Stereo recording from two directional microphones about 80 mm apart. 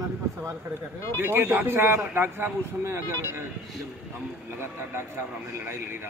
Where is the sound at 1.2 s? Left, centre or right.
Right.